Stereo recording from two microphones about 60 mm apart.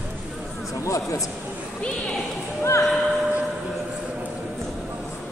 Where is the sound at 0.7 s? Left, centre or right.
Left.